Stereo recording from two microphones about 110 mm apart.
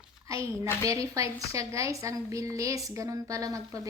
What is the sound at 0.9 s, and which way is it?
A woman's voice, 30° right (ahead or behind).